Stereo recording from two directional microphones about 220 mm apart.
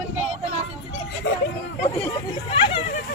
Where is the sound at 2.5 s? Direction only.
25° left (ahead or behind).